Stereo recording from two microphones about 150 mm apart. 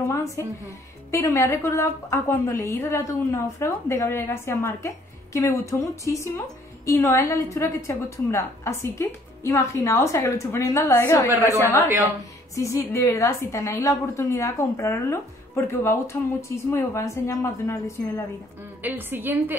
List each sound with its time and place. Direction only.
0.1 s a woman's voice: 20° left (ahead or behind)
18.8 s a woman's voice: 15° right (ahead or behind)